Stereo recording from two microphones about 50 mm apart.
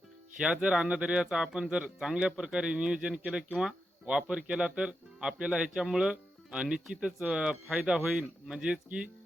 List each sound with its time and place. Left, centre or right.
0.3 s speech: centre